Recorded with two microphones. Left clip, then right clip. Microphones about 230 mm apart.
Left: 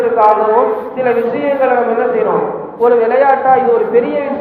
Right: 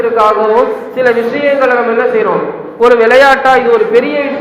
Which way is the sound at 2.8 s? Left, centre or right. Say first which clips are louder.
Right 5 dB; right.